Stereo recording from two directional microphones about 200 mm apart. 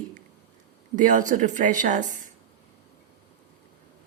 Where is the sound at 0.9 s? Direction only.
40° right (ahead or behind).